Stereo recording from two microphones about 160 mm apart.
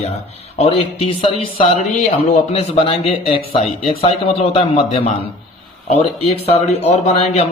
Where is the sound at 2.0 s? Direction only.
50° left (ahead or behind).